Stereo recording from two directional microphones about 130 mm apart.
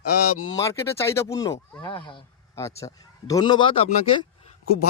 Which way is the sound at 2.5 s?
25° left (ahead or behind).